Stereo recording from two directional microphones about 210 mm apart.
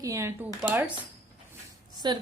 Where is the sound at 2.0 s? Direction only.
20° right (ahead or behind).